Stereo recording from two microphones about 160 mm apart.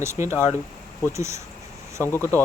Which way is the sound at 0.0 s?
15° right (ahead or behind).